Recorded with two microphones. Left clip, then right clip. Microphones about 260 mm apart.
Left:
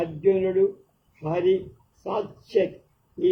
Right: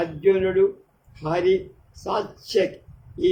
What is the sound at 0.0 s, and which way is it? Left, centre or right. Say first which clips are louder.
A man's voice: right 2 dB; right.